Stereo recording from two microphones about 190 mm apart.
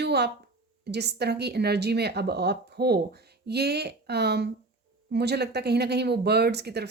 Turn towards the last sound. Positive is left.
turn(degrees=-60)  # may be behind; listen again after turning